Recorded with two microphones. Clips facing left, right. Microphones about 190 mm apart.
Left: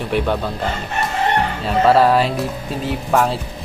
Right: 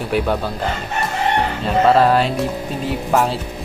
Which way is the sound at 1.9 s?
Centre (ahead or behind).